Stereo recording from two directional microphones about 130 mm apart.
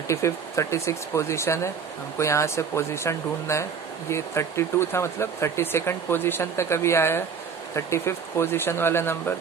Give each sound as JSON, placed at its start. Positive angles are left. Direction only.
{"t": 0.1, "sound": "speech", "side_deg": 20}